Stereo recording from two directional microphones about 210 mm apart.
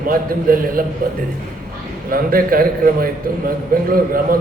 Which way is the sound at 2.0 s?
45° right (ahead or behind).